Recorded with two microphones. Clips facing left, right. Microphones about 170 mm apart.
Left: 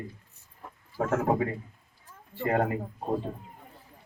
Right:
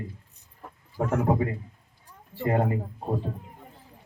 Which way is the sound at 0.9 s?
15° right (ahead or behind).